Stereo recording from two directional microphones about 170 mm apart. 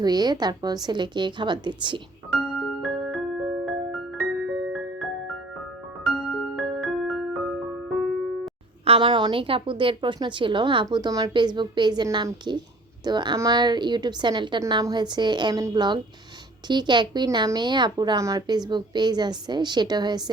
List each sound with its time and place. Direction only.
0.0 s a woman's voice: 25° right (ahead or behind)
2.8 s music: centre (ahead or behind)
6.4 s music: centre (ahead or behind)
8.8 s a woman's voice: 30° right (ahead or behind)